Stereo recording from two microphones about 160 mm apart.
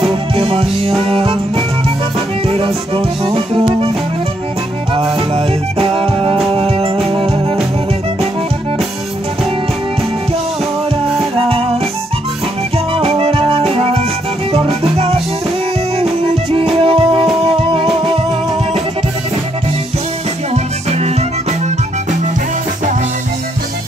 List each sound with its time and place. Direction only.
0.1 s music: 35° right (ahead or behind)
2.4 s music: 35° right (ahead or behind)
5.1 s music: 35° right (ahead or behind)
11.3 s music: 35° right (ahead or behind)
12.7 s music: 40° right (ahead or behind)
20.5 s music: 45° right (ahead or behind)